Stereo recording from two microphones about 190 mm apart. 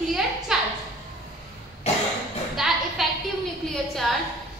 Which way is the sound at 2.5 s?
Centre (ahead or behind).